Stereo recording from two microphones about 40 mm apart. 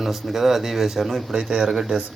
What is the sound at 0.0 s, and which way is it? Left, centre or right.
Speech, centre.